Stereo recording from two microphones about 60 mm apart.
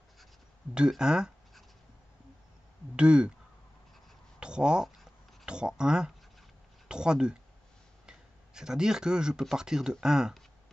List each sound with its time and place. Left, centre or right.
0.7 s speech: centre
3.0 s speech: centre
4.4 s a sound: centre
5.4 s speech: centre